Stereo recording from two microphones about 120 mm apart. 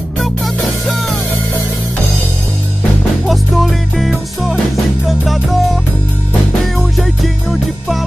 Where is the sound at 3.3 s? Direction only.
Centre (ahead or behind).